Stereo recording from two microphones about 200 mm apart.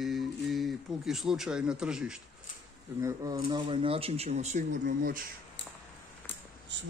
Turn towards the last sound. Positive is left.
turn(degrees=-60)  # may be behind; listen again after turning